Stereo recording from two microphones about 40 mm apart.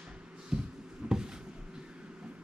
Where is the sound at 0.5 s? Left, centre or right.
Right.